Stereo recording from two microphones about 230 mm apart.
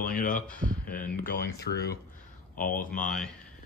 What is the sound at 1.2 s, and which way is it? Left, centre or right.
Speech, left.